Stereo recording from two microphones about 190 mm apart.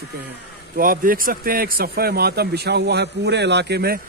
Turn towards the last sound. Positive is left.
turn(degrees=-55)  # may be behind; listen again after turning